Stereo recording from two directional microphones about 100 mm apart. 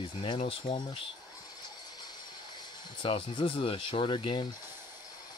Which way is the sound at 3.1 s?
60° left (ahead or behind).